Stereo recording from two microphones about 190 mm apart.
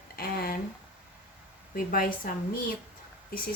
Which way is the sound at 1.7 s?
50° left (ahead or behind).